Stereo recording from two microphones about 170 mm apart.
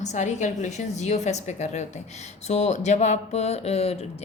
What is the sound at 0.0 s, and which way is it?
A woman's voice, 45° left (ahead or behind).